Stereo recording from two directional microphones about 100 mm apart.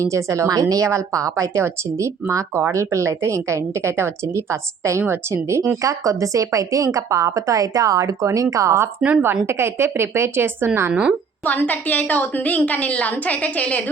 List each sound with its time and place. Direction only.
0.0 s a woman's voice: 30° right (ahead or behind)
9.0 s speech: 5° right (ahead or behind)
9.2 s a woman's voice: 25° right (ahead or behind)
11.4 s a woman's voice: 15° left (ahead or behind)